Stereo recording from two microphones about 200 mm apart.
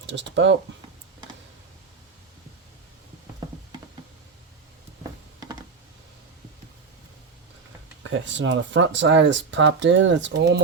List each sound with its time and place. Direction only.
0.0 s speech: 65° right (ahead or behind)
8.0 s speech: 65° right (ahead or behind)